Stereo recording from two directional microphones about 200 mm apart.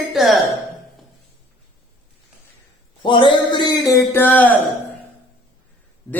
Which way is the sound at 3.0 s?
25° left (ahead or behind).